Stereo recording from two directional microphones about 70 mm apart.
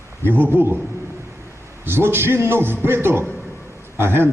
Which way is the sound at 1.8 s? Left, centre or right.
Right.